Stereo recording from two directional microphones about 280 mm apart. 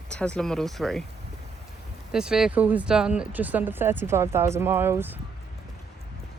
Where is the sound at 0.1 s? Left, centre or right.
Centre.